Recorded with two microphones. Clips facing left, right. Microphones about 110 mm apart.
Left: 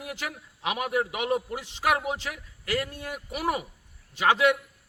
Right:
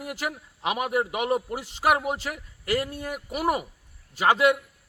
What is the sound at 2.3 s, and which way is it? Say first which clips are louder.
A man's voice: right 3 dB; 35° right (ahead or behind).